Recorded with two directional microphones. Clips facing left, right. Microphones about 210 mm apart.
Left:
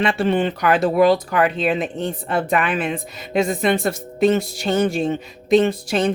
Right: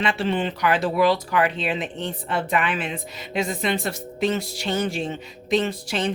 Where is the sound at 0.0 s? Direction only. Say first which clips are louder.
Left 5 dB; 45° left (ahead or behind).